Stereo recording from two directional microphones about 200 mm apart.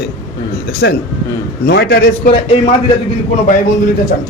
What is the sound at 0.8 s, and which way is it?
A man's voice, 60° left (ahead or behind).